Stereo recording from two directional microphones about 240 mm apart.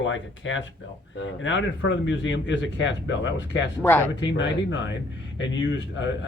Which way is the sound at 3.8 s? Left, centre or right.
Centre.